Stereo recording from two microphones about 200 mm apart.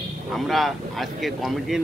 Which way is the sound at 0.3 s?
Centre (ahead or behind).